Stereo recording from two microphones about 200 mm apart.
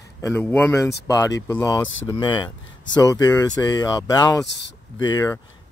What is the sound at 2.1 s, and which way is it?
Speech, 20° left (ahead or behind).